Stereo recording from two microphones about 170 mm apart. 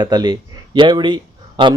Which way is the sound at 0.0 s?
25° right (ahead or behind).